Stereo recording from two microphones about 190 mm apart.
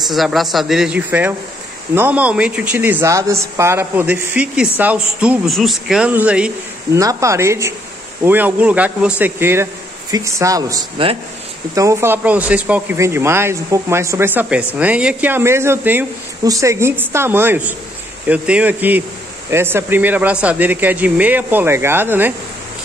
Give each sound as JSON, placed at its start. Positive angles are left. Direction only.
{"t": 0.1, "sound": "a woman's voice", "side_deg": 0}
{"t": 6.9, "sound": "speech", "side_deg": -15}